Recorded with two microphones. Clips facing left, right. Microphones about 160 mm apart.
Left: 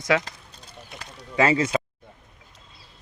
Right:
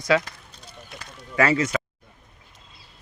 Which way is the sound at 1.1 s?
25° left (ahead or behind).